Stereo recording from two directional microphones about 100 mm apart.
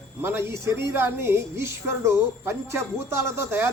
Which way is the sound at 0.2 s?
25° right (ahead or behind).